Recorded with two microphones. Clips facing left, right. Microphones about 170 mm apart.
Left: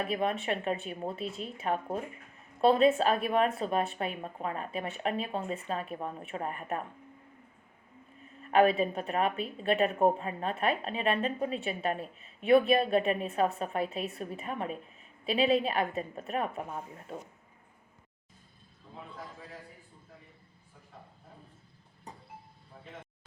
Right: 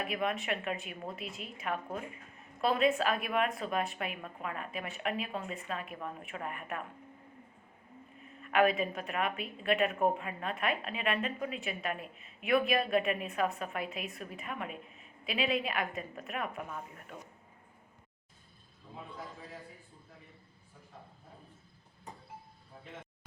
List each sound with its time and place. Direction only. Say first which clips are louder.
0.0 s a woman's voice: left 3 dB; 35° left (ahead or behind)
8.4 s a woman's voice: left 4 dB; 35° left (ahead or behind)